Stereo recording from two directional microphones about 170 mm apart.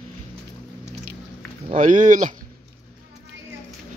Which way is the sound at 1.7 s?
45° right (ahead or behind).